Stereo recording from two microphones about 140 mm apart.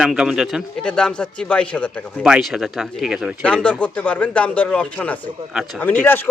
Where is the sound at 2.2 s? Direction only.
5° right (ahead or behind).